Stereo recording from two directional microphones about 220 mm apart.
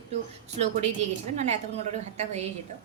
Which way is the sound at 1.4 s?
30° right (ahead or behind).